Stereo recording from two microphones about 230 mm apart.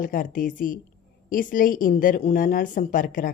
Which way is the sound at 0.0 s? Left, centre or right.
Left.